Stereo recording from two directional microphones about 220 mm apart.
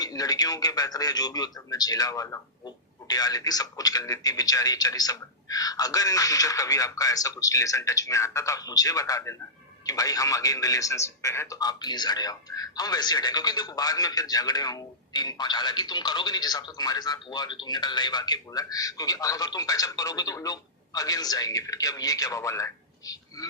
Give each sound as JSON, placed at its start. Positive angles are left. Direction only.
{"t": 0.0, "sound": "a man's voice", "side_deg": 15}